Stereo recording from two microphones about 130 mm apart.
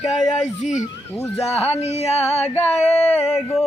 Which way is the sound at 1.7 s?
55° left (ahead or behind).